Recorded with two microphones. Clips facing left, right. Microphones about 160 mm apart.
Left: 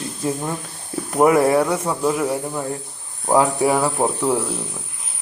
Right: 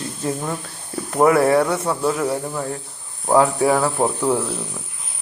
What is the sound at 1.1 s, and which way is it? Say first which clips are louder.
Speech: even; 15° left (ahead or behind).